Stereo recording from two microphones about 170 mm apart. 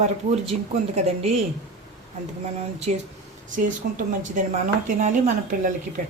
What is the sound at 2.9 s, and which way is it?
A woman's voice, 45° right (ahead or behind).